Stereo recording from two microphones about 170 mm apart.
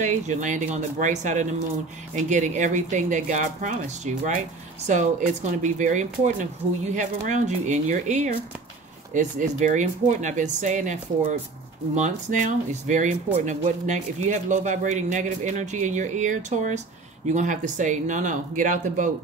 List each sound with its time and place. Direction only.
0.0 s speech: 45° right (ahead or behind)